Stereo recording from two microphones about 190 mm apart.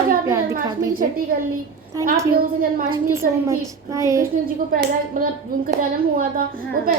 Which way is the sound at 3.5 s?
15° right (ahead or behind).